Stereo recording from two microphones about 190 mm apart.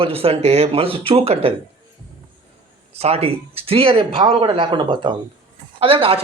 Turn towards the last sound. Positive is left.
turn(degrees=-30)  # may be behind; listen again after turning